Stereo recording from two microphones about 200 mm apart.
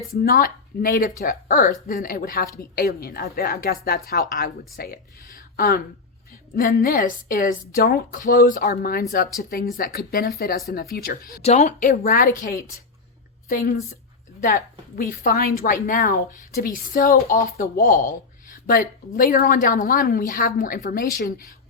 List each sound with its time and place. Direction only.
0.1 s a woman's voice: 45° left (ahead or behind)
11.4 s speech: 35° left (ahead or behind)
13.5 s a woman's voice: 40° left (ahead or behind)